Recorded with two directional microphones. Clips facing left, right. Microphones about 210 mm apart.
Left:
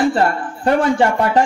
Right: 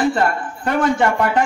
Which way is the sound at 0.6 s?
35° left (ahead or behind).